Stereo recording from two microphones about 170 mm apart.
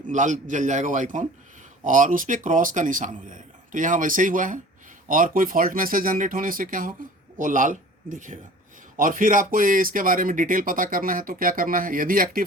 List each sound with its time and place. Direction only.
0.1 s a man's voice: 45° right (ahead or behind)